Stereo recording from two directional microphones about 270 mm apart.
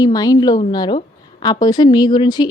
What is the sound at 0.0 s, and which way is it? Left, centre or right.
A woman's voice, centre.